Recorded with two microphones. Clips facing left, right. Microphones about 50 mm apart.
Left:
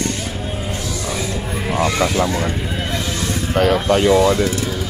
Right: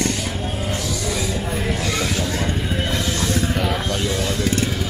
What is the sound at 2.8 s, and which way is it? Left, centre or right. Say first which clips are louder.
Music: even; centre.